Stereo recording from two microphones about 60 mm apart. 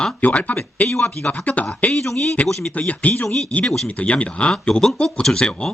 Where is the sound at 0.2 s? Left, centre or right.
Left.